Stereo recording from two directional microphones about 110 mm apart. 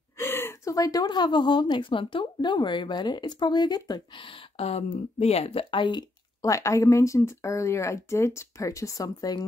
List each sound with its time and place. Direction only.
0.2 s a sound: 20° left (ahead or behind)
1.0 s a woman's voice: 45° left (ahead or behind)
6.4 s speech: 30° left (ahead or behind)